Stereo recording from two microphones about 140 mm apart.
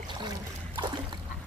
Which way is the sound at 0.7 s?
30° right (ahead or behind).